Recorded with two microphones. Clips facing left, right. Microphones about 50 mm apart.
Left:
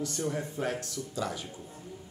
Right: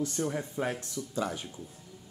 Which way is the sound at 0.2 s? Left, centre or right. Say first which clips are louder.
Left 1 dB; centre.